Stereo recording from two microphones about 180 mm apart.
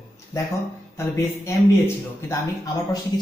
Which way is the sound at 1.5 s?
15° left (ahead or behind).